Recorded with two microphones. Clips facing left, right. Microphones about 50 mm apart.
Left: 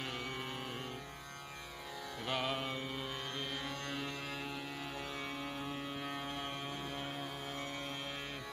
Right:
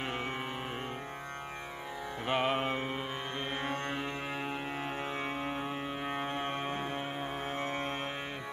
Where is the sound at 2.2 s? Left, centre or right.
Right.